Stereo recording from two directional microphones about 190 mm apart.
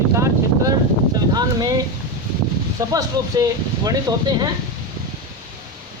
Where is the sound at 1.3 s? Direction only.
20° right (ahead or behind).